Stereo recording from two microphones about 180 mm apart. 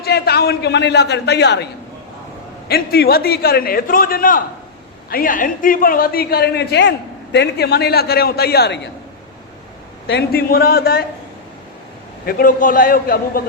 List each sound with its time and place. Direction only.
0.0 s a man's voice: 60° left (ahead or behind)
2.6 s a man's voice: 60° left (ahead or behind)
10.1 s a man's voice: 65° left (ahead or behind)
12.2 s a man's voice: 55° left (ahead or behind)